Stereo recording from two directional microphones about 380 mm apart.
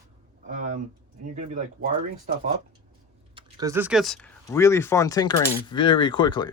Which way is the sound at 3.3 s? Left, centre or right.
Centre.